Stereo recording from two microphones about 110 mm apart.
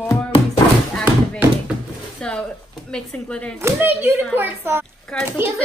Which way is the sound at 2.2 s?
5° left (ahead or behind).